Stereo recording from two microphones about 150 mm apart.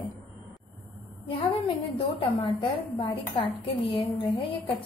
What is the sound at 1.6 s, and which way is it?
A woman's voice, 40° left (ahead or behind).